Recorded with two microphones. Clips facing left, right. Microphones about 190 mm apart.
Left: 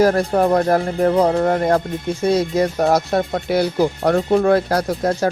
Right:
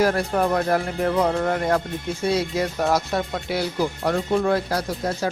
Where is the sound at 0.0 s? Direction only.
40° left (ahead or behind).